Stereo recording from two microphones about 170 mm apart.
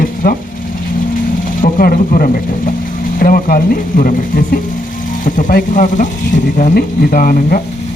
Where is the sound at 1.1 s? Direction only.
55° left (ahead or behind).